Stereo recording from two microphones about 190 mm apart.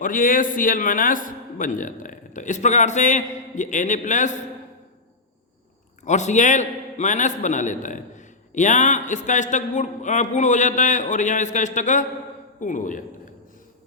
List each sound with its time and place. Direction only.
0.0 s a man's voice: 45° left (ahead or behind)
6.1 s a man's voice: 40° left (ahead or behind)